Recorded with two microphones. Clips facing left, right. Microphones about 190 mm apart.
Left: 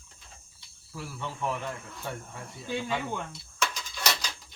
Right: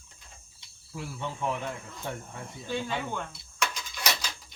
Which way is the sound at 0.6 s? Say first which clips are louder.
Right 2 dB; 15° right (ahead or behind).